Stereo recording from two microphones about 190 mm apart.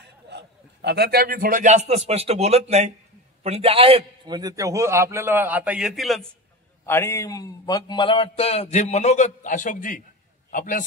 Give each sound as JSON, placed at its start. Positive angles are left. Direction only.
{"t": 0.0, "sound": "a man's voice", "side_deg": -65}
{"t": 6.9, "sound": "a man's voice", "side_deg": 15}